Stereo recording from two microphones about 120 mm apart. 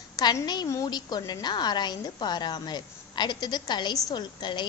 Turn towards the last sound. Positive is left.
turn(degrees=40)  # may be behind; listen again after turning